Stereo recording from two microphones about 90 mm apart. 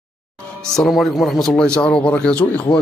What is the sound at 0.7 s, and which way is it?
Speech, centre (ahead or behind).